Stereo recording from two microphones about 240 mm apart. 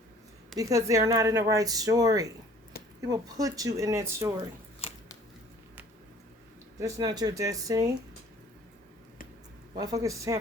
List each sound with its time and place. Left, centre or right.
0.5 s speech: centre
2.7 s a sound: left
3.1 s speech: centre
6.7 s speech: centre
9.7 s speech: centre